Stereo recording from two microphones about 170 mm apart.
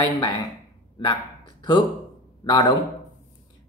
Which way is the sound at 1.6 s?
30° left (ahead or behind).